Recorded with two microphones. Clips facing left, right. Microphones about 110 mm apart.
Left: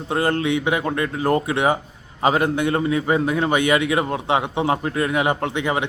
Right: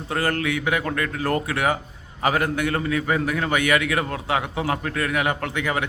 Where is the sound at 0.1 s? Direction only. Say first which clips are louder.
Left 4 dB; 20° left (ahead or behind).